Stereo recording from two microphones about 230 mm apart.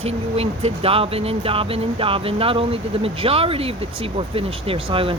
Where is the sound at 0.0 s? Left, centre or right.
Right.